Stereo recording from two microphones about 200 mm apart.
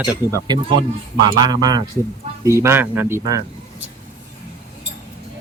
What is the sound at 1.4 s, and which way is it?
Speech, 20° right (ahead or behind).